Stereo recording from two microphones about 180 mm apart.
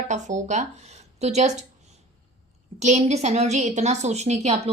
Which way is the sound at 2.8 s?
40° right (ahead or behind).